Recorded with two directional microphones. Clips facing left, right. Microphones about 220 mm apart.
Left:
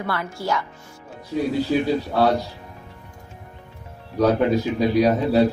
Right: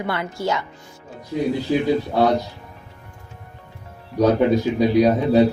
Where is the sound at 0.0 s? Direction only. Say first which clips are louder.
Right 3 dB; 20° right (ahead or behind).